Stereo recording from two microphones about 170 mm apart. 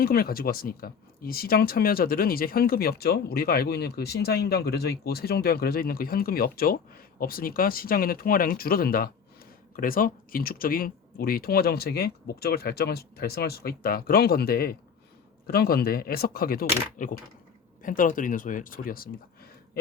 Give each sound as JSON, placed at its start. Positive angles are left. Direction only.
{"t": 0.0, "sound": "speech", "side_deg": 65}
{"t": 17.0, "sound": "speech", "side_deg": 50}